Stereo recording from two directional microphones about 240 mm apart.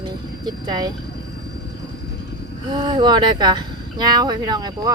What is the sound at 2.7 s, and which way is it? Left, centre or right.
Speech, centre.